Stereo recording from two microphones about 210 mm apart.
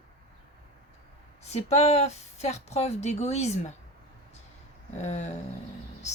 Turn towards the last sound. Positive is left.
turn(degrees=30)  # may be behind; listen again after turning